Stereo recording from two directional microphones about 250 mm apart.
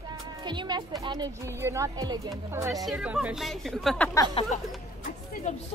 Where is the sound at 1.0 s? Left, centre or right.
Centre.